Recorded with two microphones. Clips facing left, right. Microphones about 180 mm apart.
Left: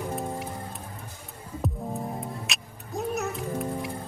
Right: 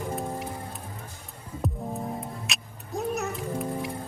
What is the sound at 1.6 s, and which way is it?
Music, centre (ahead or behind).